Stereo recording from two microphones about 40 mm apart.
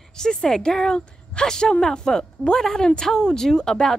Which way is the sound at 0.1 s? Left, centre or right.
Centre.